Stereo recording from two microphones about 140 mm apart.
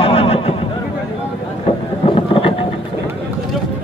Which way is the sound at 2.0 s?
40° left (ahead or behind).